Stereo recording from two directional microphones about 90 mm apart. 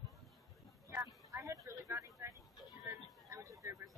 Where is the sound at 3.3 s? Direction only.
35° right (ahead or behind).